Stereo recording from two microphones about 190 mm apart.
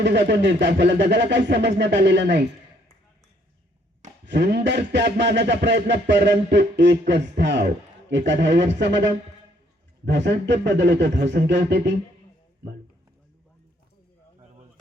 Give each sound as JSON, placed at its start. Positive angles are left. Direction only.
{"t": 0.0, "sound": "a man's voice", "side_deg": -65}
{"t": 4.3, "sound": "a man's voice", "side_deg": -60}
{"t": 10.1, "sound": "a man's voice", "side_deg": -65}